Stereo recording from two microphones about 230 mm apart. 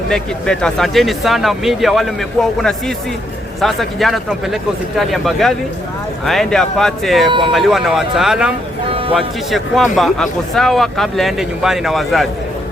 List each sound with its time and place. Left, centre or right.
0.1 s a man's voice: centre
8.9 s music: right
9.1 s a man's voice: centre